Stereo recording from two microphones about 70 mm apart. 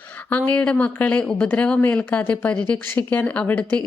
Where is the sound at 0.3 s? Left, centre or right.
Left.